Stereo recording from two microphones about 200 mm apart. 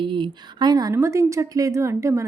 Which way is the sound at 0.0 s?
25° right (ahead or behind).